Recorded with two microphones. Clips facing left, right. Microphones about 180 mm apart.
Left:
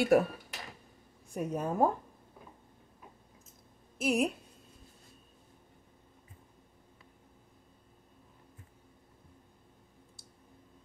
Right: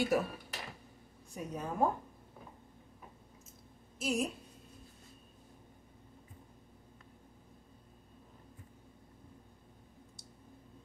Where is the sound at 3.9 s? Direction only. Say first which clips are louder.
Left 5 dB; 60° left (ahead or behind).